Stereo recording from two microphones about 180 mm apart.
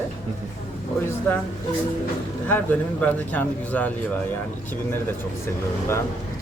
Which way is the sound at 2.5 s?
10° left (ahead or behind).